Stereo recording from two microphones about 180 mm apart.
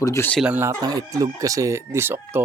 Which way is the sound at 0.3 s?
5° right (ahead or behind).